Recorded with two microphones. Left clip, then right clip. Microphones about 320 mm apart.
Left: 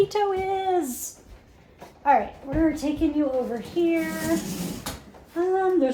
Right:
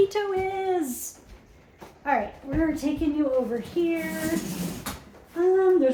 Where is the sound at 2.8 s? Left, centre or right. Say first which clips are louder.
Even; centre.